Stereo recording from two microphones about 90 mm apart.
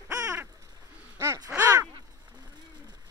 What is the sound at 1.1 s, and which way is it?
Crow, 30° right (ahead or behind).